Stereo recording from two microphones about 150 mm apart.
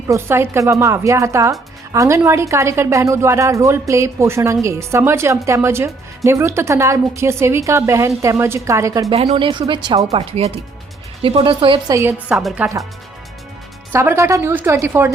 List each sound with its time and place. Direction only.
0.1 s speech: 15° right (ahead or behind)
10.1 s speech: 45° right (ahead or behind)
12.3 s speech: 5° right (ahead or behind)
13.9 s a woman's voice: 15° right (ahead or behind)